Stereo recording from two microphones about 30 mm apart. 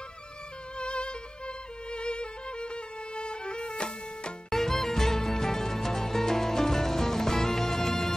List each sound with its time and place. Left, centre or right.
0.7 s music: left
4.5 s music: centre